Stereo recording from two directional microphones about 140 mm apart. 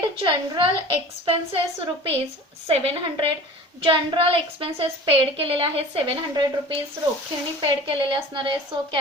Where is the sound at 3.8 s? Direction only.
40° right (ahead or behind).